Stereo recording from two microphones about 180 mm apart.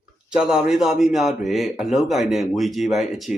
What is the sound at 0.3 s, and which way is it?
A man's voice, 5° right (ahead or behind).